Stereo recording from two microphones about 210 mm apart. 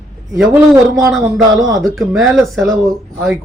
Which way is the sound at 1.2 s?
15° right (ahead or behind).